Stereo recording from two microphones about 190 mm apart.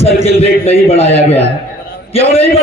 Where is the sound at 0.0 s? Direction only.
30° left (ahead or behind).